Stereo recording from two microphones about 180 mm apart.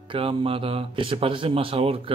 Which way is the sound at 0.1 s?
30° right (ahead or behind).